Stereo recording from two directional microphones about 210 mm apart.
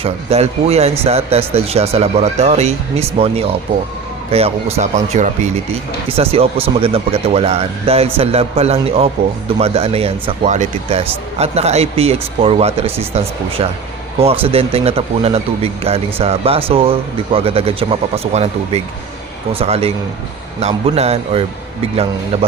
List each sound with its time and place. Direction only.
0.0 s speech: 30° right (ahead or behind)